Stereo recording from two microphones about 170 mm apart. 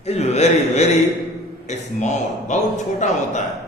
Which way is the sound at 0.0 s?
40° left (ahead or behind).